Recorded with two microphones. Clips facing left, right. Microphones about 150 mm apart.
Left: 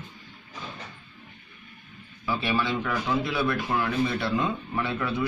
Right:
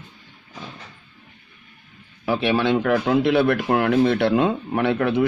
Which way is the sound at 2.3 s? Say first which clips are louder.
Right 7 dB; 70° right (ahead or behind).